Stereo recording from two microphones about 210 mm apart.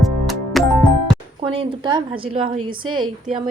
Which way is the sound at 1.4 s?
25° right (ahead or behind).